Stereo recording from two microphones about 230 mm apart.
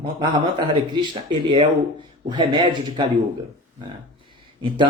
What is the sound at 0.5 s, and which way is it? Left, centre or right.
Speech, centre.